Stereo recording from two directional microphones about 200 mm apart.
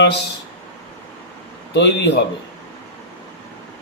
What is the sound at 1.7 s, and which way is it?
Speech, 60° left (ahead or behind).